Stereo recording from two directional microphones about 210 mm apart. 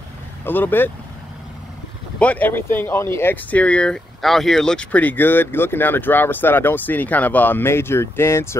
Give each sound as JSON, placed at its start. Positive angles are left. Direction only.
{"t": 0.5, "sound": "speech", "side_deg": 10}
{"t": 2.1, "sound": "speech", "side_deg": 5}